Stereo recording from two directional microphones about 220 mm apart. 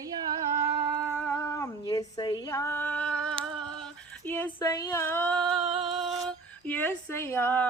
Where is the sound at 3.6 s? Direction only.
5° left (ahead or behind).